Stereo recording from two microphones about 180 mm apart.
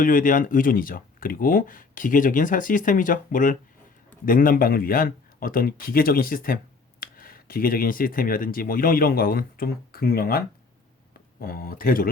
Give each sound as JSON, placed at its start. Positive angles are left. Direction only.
{"t": 0.0, "sound": "speech", "side_deg": 50}